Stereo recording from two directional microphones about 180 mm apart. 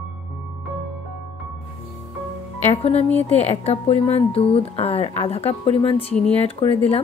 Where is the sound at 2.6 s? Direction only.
35° left (ahead or behind).